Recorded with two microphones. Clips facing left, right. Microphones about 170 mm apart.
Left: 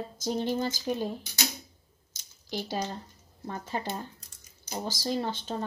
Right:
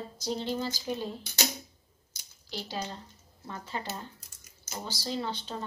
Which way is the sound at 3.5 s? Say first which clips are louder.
Left 4 dB; 50° left (ahead or behind).